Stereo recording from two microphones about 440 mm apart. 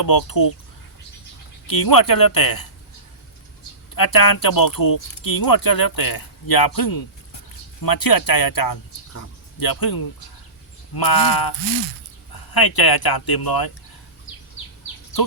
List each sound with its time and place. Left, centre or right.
0.0 s speech: left
1.6 s speech: left
3.9 s speech: left